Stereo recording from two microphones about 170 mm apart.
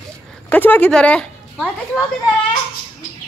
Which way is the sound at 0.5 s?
10° left (ahead or behind).